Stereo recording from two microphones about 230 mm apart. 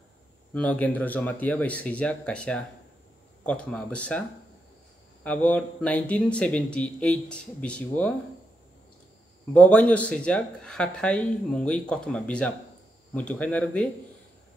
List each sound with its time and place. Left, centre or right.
0.5 s speech: centre
5.2 s speech: centre
9.5 s speech: centre